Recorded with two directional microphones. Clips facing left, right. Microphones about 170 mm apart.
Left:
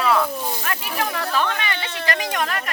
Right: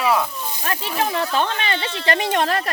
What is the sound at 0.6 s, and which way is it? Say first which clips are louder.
A woman's voice: right 2 dB; 25° right (ahead or behind).